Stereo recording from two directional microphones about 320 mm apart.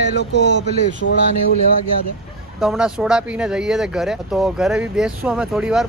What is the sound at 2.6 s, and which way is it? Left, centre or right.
Speech, centre.